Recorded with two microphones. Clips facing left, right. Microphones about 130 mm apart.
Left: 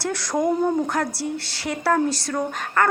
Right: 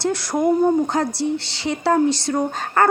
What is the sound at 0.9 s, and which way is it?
A woman's voice, 25° right (ahead or behind).